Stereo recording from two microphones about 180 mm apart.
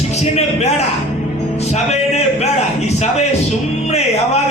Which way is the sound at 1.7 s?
35° left (ahead or behind).